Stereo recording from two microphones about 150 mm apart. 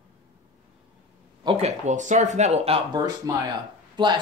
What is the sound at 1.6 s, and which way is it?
Speech, 50° right (ahead or behind).